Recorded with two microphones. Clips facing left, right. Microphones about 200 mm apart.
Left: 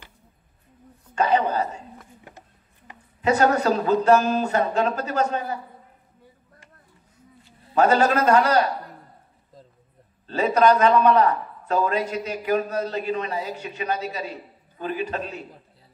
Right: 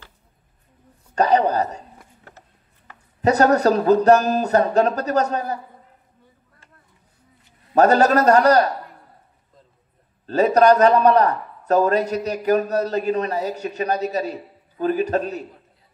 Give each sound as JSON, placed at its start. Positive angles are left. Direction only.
{"t": 1.1, "sound": "a man's voice", "side_deg": -40}
{"t": 3.2, "sound": "a man's voice", "side_deg": -40}
{"t": 7.7, "sound": "a man's voice", "side_deg": -40}
{"t": 10.2, "sound": "a man's voice", "side_deg": -40}